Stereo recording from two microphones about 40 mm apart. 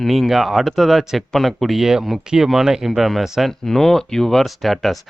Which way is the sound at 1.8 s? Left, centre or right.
Centre.